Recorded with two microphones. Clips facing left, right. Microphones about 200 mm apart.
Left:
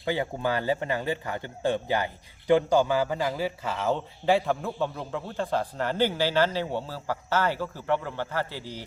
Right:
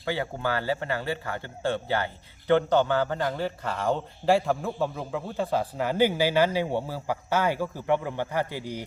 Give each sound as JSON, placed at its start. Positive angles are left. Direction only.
{"t": 0.0, "sound": "a man's voice", "side_deg": 15}